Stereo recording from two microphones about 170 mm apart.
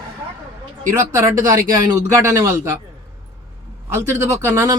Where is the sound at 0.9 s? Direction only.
15° right (ahead or behind).